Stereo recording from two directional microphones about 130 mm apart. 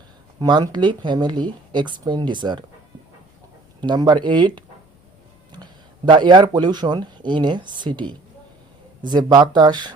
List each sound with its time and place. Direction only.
0.3 s speech: 35° right (ahead or behind)
3.8 s speech: 35° right (ahead or behind)
6.1 s speech: 35° right (ahead or behind)